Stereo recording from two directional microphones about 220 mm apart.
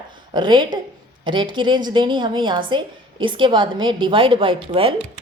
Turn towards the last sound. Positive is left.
turn(degrees=-25)  # may be behind; listen again after turning